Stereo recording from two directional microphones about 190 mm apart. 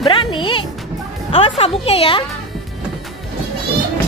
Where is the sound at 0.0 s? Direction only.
25° left (ahead or behind).